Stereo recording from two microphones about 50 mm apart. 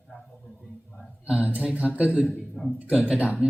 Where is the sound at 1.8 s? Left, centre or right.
Right.